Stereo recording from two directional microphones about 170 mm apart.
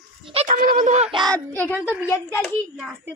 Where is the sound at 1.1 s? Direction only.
25° right (ahead or behind).